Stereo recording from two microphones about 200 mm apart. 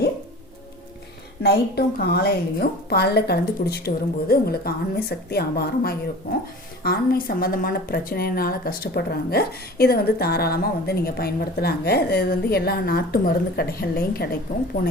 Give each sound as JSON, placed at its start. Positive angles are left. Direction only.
{"t": 1.4, "sound": "a woman's voice", "side_deg": 55}